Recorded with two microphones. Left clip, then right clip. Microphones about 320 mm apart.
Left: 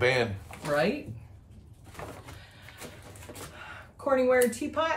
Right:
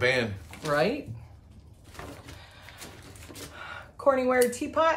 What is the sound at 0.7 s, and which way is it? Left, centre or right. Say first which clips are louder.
Speech: right 1 dB; centre.